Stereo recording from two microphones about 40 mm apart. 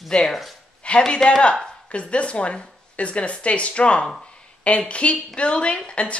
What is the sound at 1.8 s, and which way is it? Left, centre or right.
A woman's voice, left.